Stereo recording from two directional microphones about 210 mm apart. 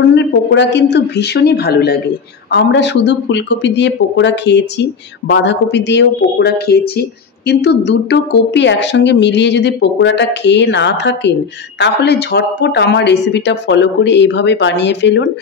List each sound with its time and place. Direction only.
0.0 s speech: 60° left (ahead or behind)